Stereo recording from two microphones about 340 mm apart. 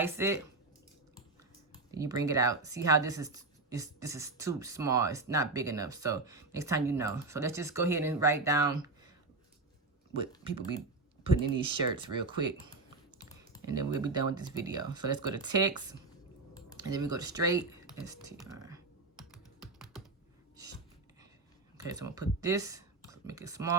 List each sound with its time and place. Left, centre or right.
0.0 s speech: centre
1.9 s speech: centre
11.2 s speech: centre
13.7 s speech: centre
16.7 s computer keyboard: centre
21.8 s speech: centre